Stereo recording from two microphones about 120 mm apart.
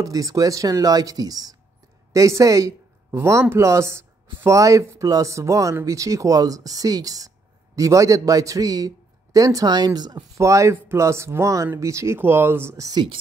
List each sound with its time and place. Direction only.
0.0 s a woman's voice: 30° right (ahead or behind)